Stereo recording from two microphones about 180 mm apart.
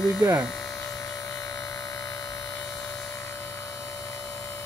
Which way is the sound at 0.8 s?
20° left (ahead or behind).